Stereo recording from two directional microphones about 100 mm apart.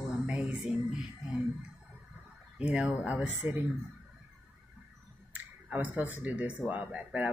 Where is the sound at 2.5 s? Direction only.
10° right (ahead or behind).